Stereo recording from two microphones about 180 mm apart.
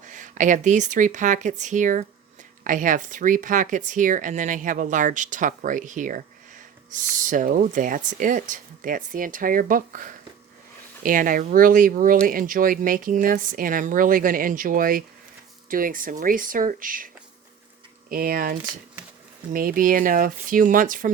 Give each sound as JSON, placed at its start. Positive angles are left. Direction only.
{"t": 0.0, "sound": "speech", "side_deg": -45}
{"t": 18.1, "sound": "speech", "side_deg": -55}
{"t": 19.5, "sound": "speech", "side_deg": -50}